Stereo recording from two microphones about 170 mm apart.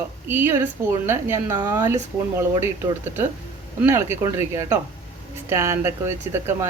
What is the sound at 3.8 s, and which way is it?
A woman's voice, 15° right (ahead or behind).